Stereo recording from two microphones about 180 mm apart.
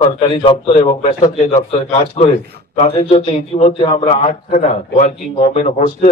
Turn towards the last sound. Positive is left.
turn(degrees=40)  # may be behind; listen again after turning